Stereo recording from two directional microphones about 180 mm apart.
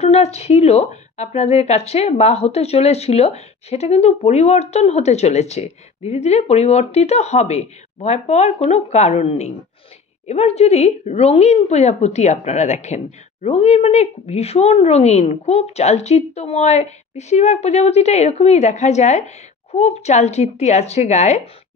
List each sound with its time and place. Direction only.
0.0 s a woman's voice: 35° left (ahead or behind)